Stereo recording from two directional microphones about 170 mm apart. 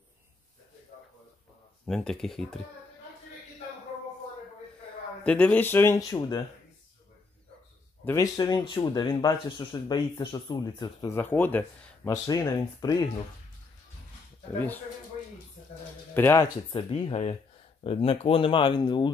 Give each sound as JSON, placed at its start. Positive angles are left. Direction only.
{"t": 1.9, "sound": "speech", "side_deg": 5}
{"t": 5.2, "sound": "speech", "side_deg": 5}
{"t": 8.0, "sound": "speech", "side_deg": 15}
{"t": 16.2, "sound": "speech", "side_deg": 15}
{"t": 16.7, "sound": "speech", "side_deg": 35}